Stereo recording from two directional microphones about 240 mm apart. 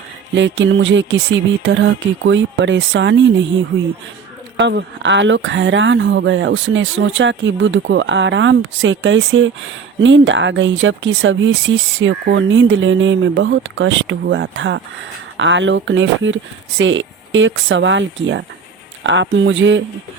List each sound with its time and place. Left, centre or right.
0.3 s speech: right